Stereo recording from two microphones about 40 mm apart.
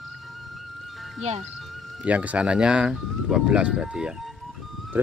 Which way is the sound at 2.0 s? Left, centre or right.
Right.